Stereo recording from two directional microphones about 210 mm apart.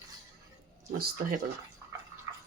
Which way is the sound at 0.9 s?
40° right (ahead or behind).